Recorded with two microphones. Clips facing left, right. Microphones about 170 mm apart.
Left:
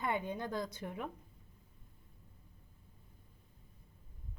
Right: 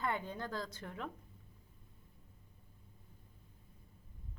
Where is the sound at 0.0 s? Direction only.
15° left (ahead or behind).